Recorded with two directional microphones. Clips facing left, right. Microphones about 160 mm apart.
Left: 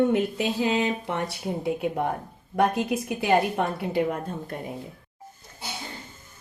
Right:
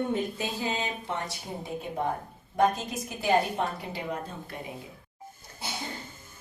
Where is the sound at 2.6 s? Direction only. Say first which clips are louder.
Left 3 dB; 65° left (ahead or behind).